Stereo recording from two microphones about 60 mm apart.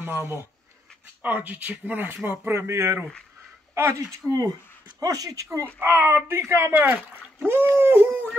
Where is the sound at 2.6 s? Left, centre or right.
Right.